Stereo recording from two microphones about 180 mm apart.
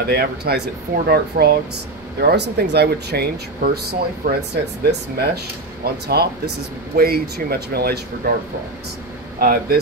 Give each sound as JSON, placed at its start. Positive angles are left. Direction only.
{"t": 0.0, "sound": "speech", "side_deg": -60}